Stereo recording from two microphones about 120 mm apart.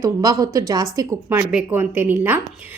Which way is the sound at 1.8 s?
15° right (ahead or behind).